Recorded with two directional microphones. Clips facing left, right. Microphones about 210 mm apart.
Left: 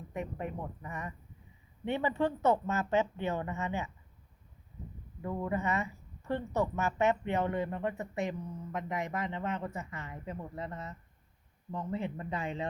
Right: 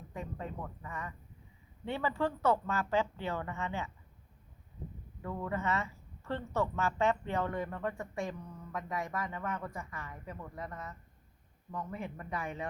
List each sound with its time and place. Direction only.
0.1 s speech: 20° left (ahead or behind)
5.2 s speech: 15° left (ahead or behind)